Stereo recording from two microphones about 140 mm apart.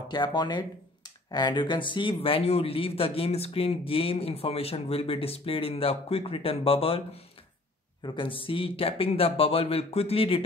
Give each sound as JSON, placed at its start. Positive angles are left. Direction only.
{"t": 0.1, "sound": "speech", "side_deg": 30}